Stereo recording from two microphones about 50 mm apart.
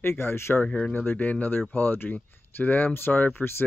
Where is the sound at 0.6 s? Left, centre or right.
Left.